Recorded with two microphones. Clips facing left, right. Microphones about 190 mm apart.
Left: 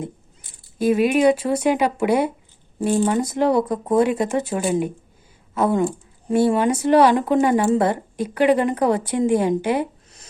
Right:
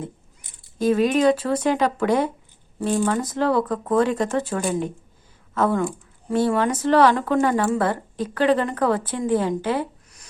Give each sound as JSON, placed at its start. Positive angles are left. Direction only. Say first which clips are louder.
{"t": 0.8, "sound": "speech", "louder": "left 2 dB", "side_deg": 10}